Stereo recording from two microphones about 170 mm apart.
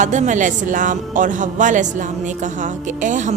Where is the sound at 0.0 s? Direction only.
45° right (ahead or behind).